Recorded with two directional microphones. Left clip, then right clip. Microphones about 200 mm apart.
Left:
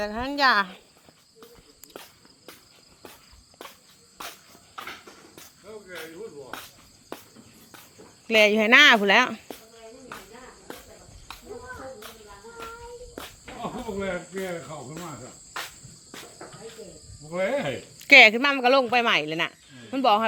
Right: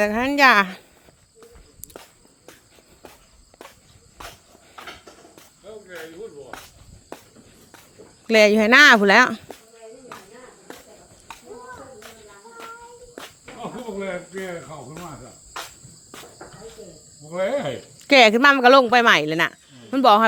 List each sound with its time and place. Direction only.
0.0 s speech: 55° right (ahead or behind)
5.6 s snake: centre (ahead or behind)
8.3 s speech: 45° right (ahead or behind)
13.6 s speech: 10° left (ahead or behind)
17.2 s cricket: centre (ahead or behind)
18.0 s speech: 35° right (ahead or behind)